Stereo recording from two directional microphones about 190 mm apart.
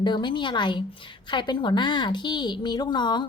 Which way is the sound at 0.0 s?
25° left (ahead or behind).